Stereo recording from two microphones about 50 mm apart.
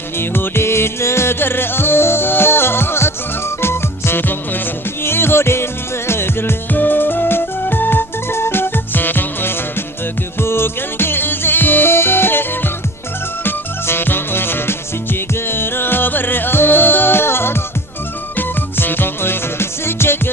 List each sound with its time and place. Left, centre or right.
0.2 s music: left